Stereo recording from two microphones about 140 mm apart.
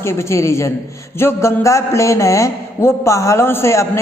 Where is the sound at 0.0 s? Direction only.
20° left (ahead or behind).